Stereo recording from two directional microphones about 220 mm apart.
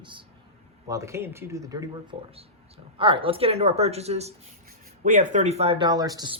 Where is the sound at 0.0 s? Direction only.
20° right (ahead or behind).